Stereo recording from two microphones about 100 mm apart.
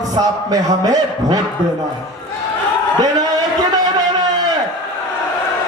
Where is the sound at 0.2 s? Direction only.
40° right (ahead or behind).